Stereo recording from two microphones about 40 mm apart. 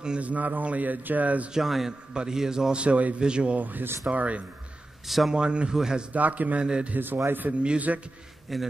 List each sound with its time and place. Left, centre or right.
0.2 s a man's voice: right
1.5 s a man's voice: centre
2.7 s speech: right
3.5 s a man's voice: right
5.0 s speech: centre
5.3 s a man's voice: right
6.1 s a man's voice: right
6.6 s speech: right
7.0 s a man's voice: right
7.9 s a man's voice: right
8.5 s a man's voice: centre